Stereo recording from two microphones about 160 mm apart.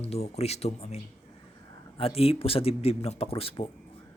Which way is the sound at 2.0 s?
40° left (ahead or behind).